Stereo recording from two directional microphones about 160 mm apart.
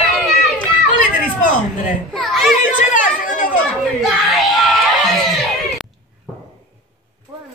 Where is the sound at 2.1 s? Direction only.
Centre (ahead or behind).